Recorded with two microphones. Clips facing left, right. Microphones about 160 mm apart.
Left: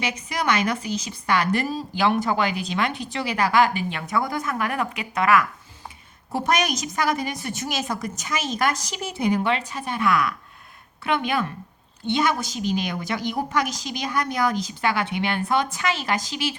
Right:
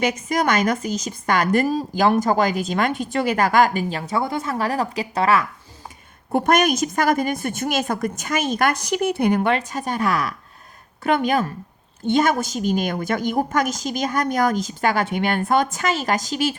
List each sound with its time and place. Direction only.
0.0 s a woman's voice: 45° right (ahead or behind); by 5.5 s 30° right (ahead or behind)
6.3 s a woman's voice: 55° right (ahead or behind)